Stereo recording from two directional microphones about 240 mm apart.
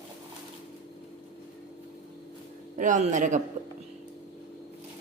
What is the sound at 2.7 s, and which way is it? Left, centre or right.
Speech, right.